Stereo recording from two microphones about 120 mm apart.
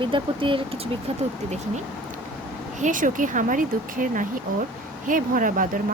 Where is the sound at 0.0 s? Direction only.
45° right (ahead or behind).